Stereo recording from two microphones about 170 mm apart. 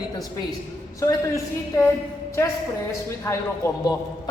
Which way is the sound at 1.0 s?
15° left (ahead or behind).